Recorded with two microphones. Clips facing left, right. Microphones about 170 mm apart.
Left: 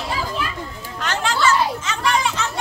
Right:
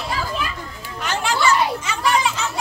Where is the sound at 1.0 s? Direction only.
10° right (ahead or behind).